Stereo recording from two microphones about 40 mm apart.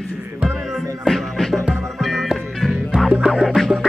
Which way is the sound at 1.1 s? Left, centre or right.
Centre.